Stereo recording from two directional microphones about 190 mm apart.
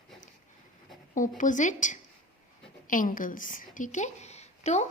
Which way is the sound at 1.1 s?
45° left (ahead or behind).